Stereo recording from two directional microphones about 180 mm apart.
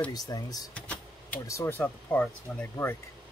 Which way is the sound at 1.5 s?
15° left (ahead or behind).